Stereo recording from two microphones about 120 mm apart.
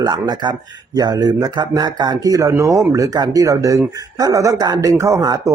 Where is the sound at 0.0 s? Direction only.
35° right (ahead or behind).